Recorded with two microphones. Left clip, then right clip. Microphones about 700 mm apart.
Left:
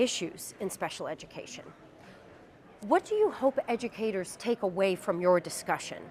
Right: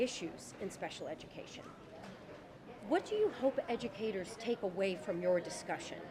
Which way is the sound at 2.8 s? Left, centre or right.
Left.